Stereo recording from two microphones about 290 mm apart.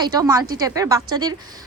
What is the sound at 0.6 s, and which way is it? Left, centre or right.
Speech, centre.